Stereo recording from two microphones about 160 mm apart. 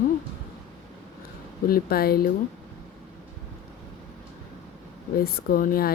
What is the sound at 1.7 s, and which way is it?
Speech, 70° left (ahead or behind).